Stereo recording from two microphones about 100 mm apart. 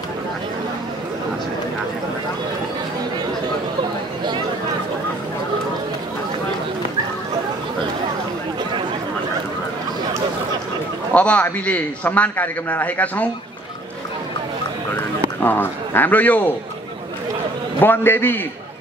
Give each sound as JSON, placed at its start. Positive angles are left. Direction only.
{"t": 11.1, "sound": "a man's voice", "side_deg": 15}
{"t": 15.4, "sound": "a man's voice", "side_deg": 20}
{"t": 17.7, "sound": "a man's voice", "side_deg": 20}